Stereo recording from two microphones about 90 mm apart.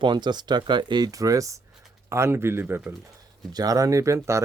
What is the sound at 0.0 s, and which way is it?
Speech, 60° right (ahead or behind).